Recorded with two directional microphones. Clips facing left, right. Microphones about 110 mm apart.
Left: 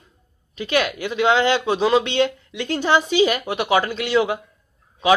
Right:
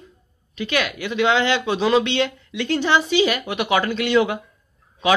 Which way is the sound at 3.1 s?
40° left (ahead or behind).